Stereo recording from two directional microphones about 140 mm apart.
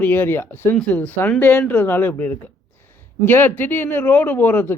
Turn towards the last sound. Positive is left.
turn(degrees=15)  # may be behind; listen again after turning